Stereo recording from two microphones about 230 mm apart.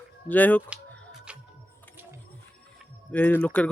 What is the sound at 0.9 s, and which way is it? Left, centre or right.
Music, centre.